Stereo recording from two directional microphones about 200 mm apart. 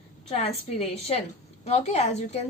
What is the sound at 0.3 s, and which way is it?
A woman's voice, 30° left (ahead or behind).